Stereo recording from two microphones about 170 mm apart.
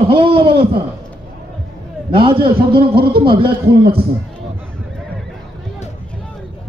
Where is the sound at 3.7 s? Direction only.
65° right (ahead or behind).